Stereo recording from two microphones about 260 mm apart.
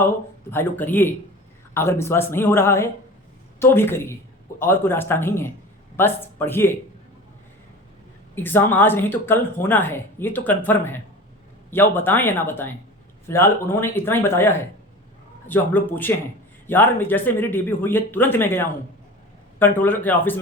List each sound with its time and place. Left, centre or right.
0.5 s speech: centre
8.4 s speech: centre